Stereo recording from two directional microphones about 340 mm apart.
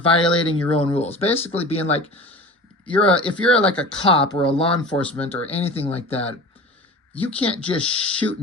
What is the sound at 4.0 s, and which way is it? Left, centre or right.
Speech, centre.